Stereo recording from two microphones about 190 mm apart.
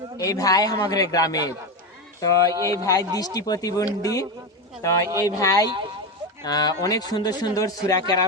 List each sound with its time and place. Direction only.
0.2 s a man's voice: 20° left (ahead or behind)
2.6 s a man's voice: 20° right (ahead or behind)
2.8 s a man's voice: 20° left (ahead or behind)